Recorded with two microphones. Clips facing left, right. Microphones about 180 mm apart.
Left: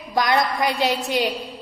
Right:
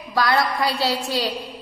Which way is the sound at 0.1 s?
20° left (ahead or behind).